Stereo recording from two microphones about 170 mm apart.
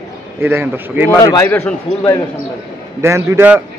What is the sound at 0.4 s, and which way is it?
Speech, 15° right (ahead or behind).